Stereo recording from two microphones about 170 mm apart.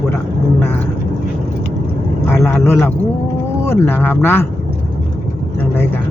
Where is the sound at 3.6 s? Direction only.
15° left (ahead or behind).